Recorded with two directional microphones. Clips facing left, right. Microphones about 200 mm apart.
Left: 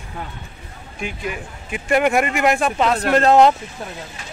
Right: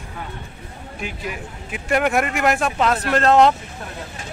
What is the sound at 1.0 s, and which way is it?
Speech, centre (ahead or behind).